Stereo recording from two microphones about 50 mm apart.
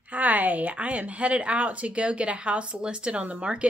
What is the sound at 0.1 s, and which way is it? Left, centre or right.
Speech, right.